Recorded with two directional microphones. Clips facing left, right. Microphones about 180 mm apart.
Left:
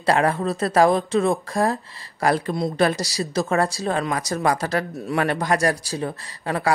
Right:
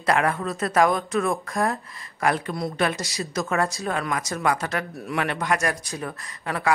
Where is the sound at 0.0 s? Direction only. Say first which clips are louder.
Left 3 dB; 30° left (ahead or behind).